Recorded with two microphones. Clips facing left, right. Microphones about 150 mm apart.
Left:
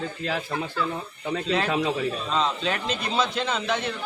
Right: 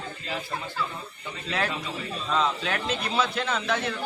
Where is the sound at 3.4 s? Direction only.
20° left (ahead or behind).